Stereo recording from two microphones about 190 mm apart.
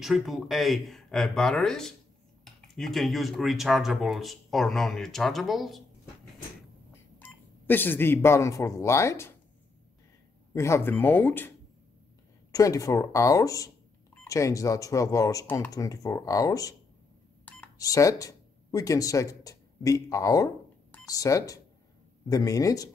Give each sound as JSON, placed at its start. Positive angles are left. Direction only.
{"t": 0.0, "sound": "speech", "side_deg": 0}
{"t": 6.9, "sound": "speech", "side_deg": 10}
{"t": 10.5, "sound": "speech", "side_deg": 15}
{"t": 12.5, "sound": "speech", "side_deg": 20}